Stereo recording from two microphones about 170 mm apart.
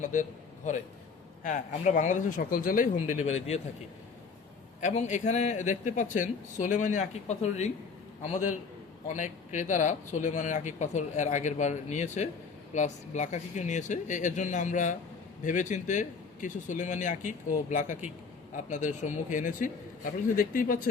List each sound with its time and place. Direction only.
0.1 s a man's voice: 45° left (ahead or behind)
3.2 s speech: 40° left (ahead or behind)
4.8 s speech: 45° left (ahead or behind)
9.0 s speech: 45° left (ahead or behind)